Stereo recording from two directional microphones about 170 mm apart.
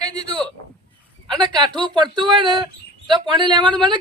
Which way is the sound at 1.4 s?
25° right (ahead or behind).